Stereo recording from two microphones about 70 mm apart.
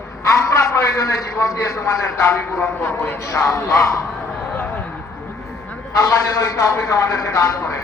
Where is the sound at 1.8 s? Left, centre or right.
Left.